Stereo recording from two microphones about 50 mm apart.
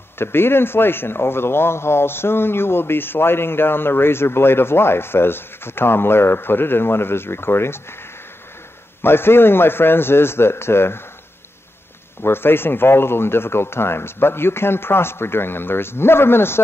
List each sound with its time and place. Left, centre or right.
0.2 s a man's voice: left
9.0 s a man's voice: left
12.2 s a man's voice: left